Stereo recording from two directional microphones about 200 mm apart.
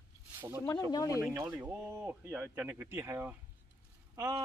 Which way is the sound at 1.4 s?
10° right (ahead or behind).